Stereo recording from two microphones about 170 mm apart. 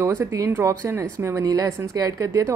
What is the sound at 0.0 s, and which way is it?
A woman's voice, 15° right (ahead or behind).